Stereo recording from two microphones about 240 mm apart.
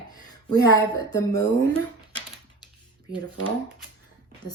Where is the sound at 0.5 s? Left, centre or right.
Centre.